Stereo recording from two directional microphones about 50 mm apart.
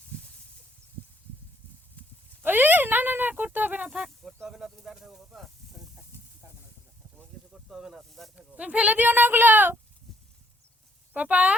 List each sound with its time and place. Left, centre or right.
2.4 s speech: right
3.8 s speech: centre
7.5 s snake: centre
8.4 s speech: right
11.1 s speech: right